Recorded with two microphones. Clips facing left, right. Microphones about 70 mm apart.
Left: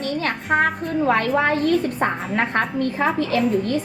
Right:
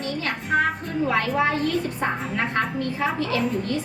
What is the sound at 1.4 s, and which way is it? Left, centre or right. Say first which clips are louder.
A woman's voice: left 4 dB; left.